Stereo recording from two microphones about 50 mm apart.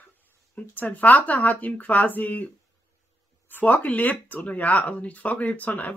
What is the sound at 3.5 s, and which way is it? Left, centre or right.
Speech, left.